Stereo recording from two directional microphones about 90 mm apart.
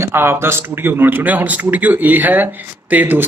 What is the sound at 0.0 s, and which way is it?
A man's voice, 25° right (ahead or behind).